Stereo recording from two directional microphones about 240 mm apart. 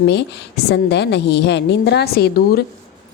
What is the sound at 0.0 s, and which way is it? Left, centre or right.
A woman's voice, left.